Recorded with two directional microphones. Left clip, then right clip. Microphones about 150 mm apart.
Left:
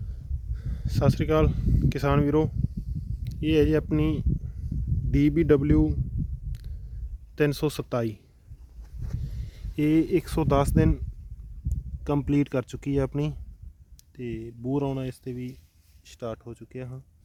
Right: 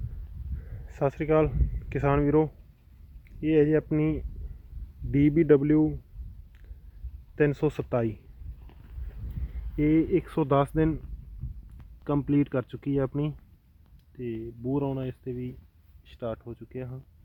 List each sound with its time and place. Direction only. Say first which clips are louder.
0.7 s speech: left 1 dB; 35° left (ahead or behind)
5.1 s speech: right 1 dB; 25° left (ahead or behind)
7.3 s speech: even; 40° left (ahead or behind)
9.7 s speech: left 1 dB; 40° left (ahead or behind)
12.0 s speech: left 1 dB; 35° left (ahead or behind)
16.0 s speech: even; 20° left (ahead or behind)